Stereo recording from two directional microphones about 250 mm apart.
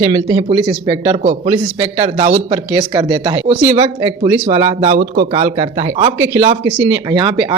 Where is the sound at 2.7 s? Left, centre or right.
Centre.